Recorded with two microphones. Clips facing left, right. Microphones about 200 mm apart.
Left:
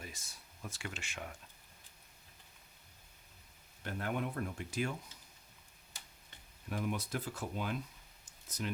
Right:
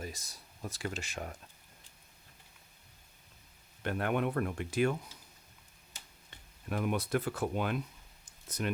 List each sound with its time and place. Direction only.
0.0 s speech: 40° right (ahead or behind)
3.8 s speech: 70° right (ahead or behind)
6.7 s speech: 65° right (ahead or behind)